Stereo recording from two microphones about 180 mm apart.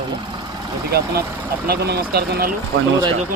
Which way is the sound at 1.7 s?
65° right (ahead or behind).